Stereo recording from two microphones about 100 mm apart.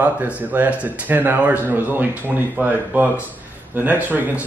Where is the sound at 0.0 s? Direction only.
15° right (ahead or behind).